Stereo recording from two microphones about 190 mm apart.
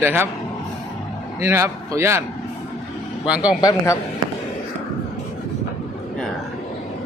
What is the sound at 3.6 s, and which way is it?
Speech, 20° left (ahead or behind).